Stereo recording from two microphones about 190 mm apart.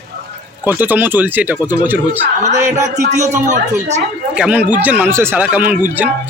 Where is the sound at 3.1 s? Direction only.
40° right (ahead or behind).